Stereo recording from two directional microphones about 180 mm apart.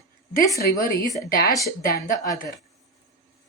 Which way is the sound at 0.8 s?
55° left (ahead or behind).